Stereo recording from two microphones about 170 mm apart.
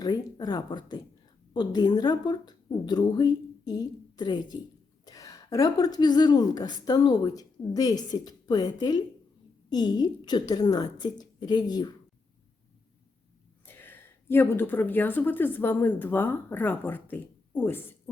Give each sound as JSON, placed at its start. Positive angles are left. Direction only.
{"t": 0.0, "sound": "a woman's voice", "side_deg": 25}
{"t": 13.7, "sound": "a woman's voice", "side_deg": 10}